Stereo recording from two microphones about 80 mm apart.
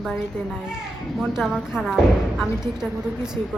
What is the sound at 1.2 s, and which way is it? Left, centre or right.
Speech, centre.